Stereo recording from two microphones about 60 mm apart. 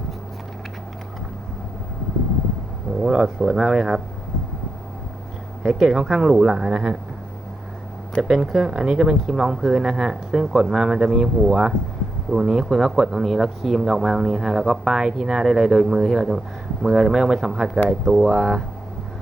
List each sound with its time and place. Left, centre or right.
3.0 s speech: centre
3.2 s speech: centre
3.6 s speech: centre
5.6 s speech: centre
8.2 s speech: centre
12.3 s speech: centre
12.6 s speech: centre